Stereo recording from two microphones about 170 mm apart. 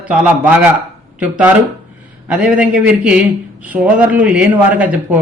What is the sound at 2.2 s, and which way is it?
A man's voice, 5° right (ahead or behind).